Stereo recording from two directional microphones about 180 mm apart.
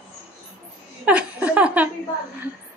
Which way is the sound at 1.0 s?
5° right (ahead or behind).